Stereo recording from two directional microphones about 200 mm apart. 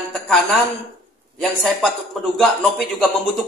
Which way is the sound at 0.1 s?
Centre (ahead or behind).